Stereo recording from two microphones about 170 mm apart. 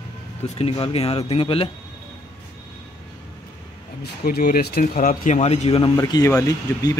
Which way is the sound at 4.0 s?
65° left (ahead or behind).